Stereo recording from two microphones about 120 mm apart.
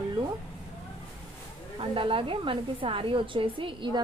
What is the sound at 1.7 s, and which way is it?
A woman's voice, 45° right (ahead or behind).